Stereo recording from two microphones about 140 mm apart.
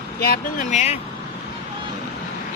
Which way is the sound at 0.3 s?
60° left (ahead or behind).